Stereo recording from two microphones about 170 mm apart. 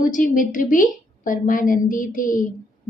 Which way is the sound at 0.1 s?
50° left (ahead or behind).